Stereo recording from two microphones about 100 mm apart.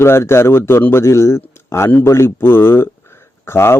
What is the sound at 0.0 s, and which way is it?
A man's voice, 25° left (ahead or behind).